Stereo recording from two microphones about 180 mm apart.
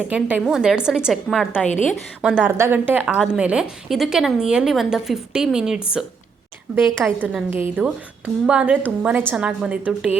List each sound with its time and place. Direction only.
0.1 s a woman's voice: 5° right (ahead or behind)